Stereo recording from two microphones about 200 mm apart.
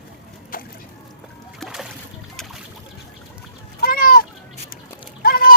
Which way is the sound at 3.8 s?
45° left (ahead or behind).